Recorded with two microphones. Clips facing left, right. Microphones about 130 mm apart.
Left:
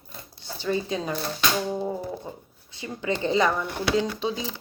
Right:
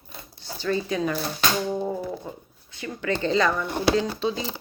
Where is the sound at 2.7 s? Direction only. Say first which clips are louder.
Right 1 dB; 25° left (ahead or behind).